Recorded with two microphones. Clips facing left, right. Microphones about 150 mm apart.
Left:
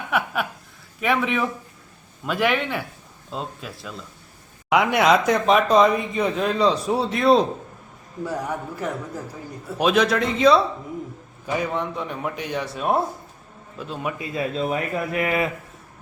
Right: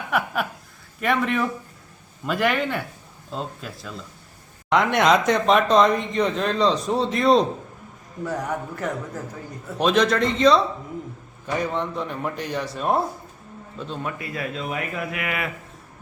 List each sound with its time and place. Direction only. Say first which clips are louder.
0.1 s a sound: even; centre (ahead or behind)
0.9 s a man's voice: even; centre (ahead or behind)
14.2 s speech: left 5 dB; 25° left (ahead or behind)